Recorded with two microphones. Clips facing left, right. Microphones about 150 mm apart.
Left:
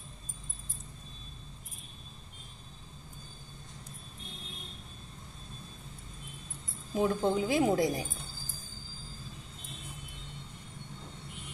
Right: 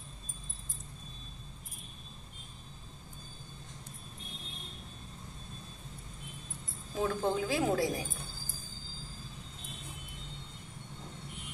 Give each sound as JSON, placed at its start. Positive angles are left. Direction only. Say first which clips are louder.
{"t": 7.0, "sound": "speech", "louder": "left 3 dB", "side_deg": 15}